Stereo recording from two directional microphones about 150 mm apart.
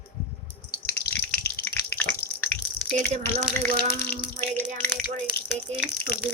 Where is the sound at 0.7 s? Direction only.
90° left.